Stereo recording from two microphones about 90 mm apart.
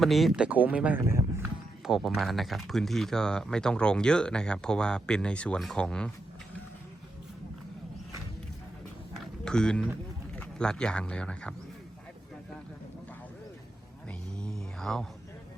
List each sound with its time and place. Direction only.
0.0 s speech: centre (ahead or behind)
0.3 s speech: 15° right (ahead or behind)
1.0 s speech: 30° right (ahead or behind)
1.8 s speech: 5° right (ahead or behind)
9.1 s a sound: 5° left (ahead or behind)
10.3 s speech: 10° left (ahead or behind)
14.1 s mantra: 10° left (ahead or behind)